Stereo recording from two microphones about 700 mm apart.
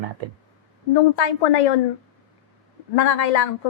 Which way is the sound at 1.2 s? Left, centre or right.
Left.